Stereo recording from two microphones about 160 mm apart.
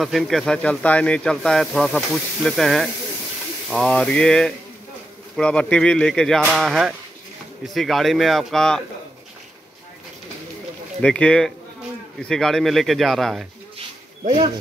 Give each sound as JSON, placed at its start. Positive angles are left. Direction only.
{"t": 0.0, "sound": "speech", "side_deg": 0}
{"t": 11.0, "sound": "speech", "side_deg": 5}
{"t": 13.7, "sound": "a sound", "side_deg": -45}